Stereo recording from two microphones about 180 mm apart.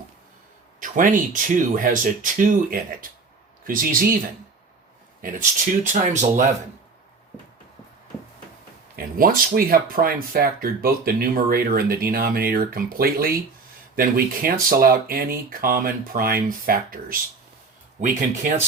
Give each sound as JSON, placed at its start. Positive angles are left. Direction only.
{"t": 0.8, "sound": "speech", "side_deg": -50}
{"t": 5.2, "sound": "speech", "side_deg": -45}
{"t": 9.0, "sound": "speech", "side_deg": -50}